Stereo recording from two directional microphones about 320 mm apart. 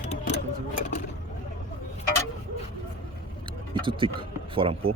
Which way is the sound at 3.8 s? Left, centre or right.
Centre.